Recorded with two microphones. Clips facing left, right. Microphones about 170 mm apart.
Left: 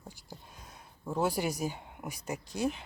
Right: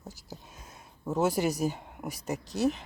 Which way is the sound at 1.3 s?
45° right (ahead or behind).